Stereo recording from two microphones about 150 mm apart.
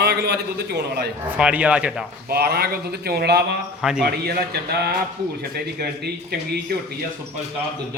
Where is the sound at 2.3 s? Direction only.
90° right.